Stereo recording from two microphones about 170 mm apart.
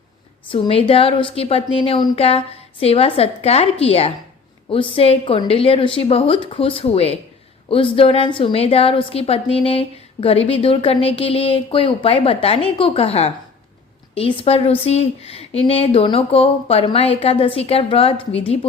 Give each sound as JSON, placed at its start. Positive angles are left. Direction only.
{"t": 0.5, "sound": "a woman's voice", "side_deg": 35}